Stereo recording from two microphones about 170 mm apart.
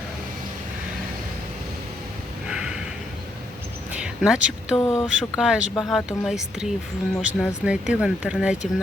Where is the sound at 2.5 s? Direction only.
5° right (ahead or behind).